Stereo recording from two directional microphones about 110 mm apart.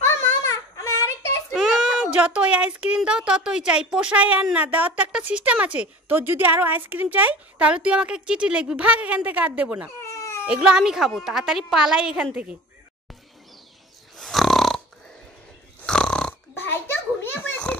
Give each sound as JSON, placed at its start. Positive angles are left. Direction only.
{"t": 0.0, "sound": "child singing", "side_deg": 25}
{"t": 1.5, "sound": "a sound", "side_deg": 0}
{"t": 2.1, "sound": "a woman's voice", "side_deg": -10}
{"t": 10.0, "sound": "cat", "side_deg": 30}
{"t": 10.4, "sound": "a woman's voice", "side_deg": -10}
{"t": 14.1, "sound": "snoring", "side_deg": 0}
{"t": 15.8, "sound": "snoring", "side_deg": 5}
{"t": 16.5, "sound": "oink", "side_deg": 20}